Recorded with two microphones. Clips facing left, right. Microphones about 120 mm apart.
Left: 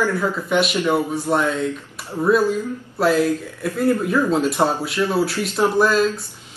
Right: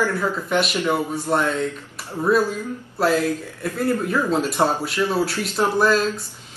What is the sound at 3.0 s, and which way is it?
Speech, centre (ahead or behind).